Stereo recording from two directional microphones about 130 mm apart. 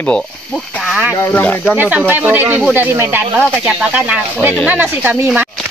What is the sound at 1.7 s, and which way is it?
Speech, 15° right (ahead or behind).